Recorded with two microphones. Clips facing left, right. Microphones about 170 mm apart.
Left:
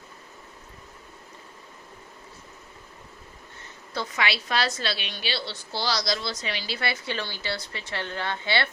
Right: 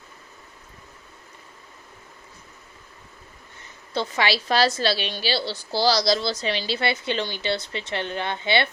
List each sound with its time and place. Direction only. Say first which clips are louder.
3.9 s a woman's voice: right 5 dB; 30° right (ahead or behind)